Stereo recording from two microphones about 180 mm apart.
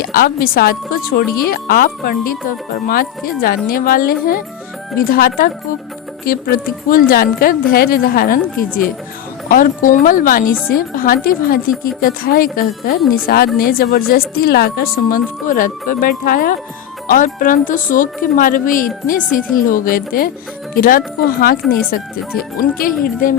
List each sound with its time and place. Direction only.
0.0 s a woman's voice: 55° left (ahead or behind)
13.0 s speech: centre (ahead or behind)
13.2 s a woman's voice: 55° left (ahead or behind)